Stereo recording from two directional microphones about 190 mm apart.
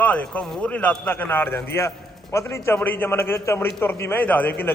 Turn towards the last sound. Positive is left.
turn(degrees=10)  # may be behind; listen again after turning